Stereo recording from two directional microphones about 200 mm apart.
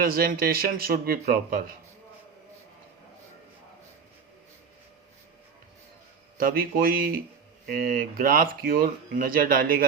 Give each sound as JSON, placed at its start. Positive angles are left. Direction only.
{"t": 0.0, "sound": "speech", "side_deg": -45}
{"t": 6.3, "sound": "speech", "side_deg": -45}